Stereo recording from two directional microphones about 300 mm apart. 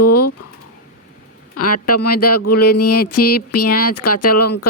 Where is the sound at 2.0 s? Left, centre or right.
Left.